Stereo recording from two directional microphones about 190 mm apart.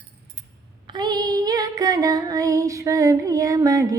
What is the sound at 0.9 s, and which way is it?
Female singing, 20° right (ahead or behind).